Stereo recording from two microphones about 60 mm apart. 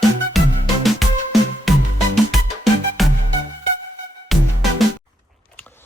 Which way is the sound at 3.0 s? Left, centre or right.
Centre.